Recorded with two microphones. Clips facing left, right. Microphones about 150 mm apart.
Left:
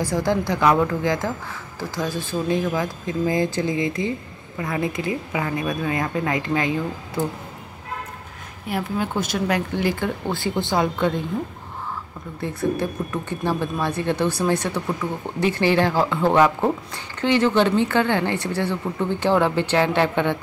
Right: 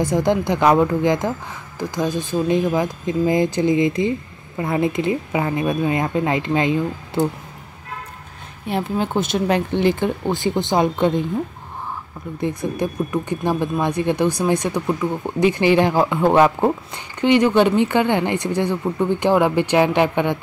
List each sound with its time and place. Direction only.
0.0 s speech: 20° right (ahead or behind)
8.6 s speech: 25° right (ahead or behind)
12.4 s speech: 15° right (ahead or behind)